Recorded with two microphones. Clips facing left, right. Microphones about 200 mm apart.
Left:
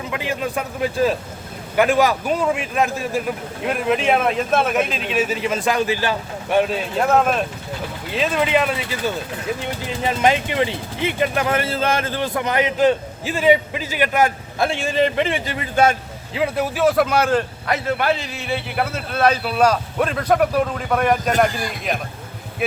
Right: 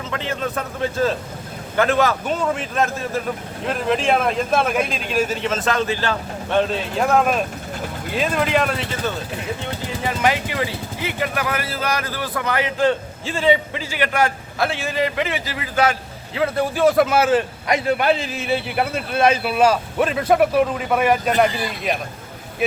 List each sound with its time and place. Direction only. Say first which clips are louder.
0.1 s a man's voice: left 1 dB; 10° left (ahead or behind)
9.8 s speech: left 2 dB; 20° left (ahead or behind)
16.7 s a man's voice: right 2 dB; centre (ahead or behind)